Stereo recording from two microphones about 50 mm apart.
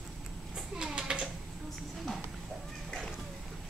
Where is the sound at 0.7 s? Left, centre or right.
Centre.